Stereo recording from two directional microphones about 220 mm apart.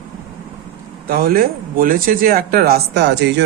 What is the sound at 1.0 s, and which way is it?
Speech, 45° right (ahead or behind).